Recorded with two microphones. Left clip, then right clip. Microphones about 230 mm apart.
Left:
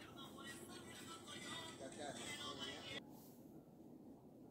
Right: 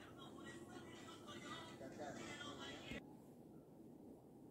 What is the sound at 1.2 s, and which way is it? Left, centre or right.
Music, left.